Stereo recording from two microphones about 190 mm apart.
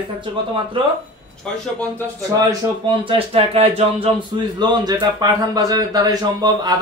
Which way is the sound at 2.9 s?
30° right (ahead or behind).